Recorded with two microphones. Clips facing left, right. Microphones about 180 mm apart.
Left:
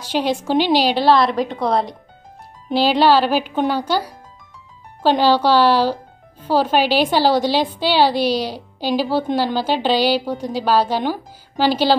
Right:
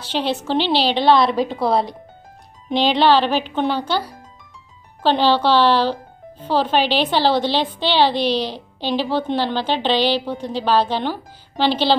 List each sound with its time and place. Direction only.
0.0 s a woman's voice: 10° left (ahead or behind)